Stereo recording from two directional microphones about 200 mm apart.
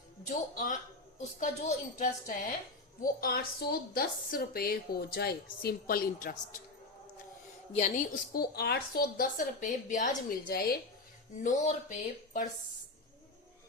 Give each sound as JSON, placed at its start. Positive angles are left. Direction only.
{"t": 0.3, "sound": "a woman's voice", "side_deg": 40}
{"t": 7.7, "sound": "a woman's voice", "side_deg": 35}
{"t": 11.4, "sound": "speech", "side_deg": 40}